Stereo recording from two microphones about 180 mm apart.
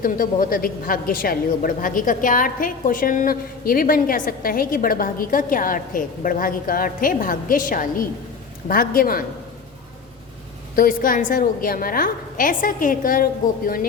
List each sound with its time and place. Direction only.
0.0 s a man's voice: 50° left (ahead or behind)
10.8 s a man's voice: 50° left (ahead or behind)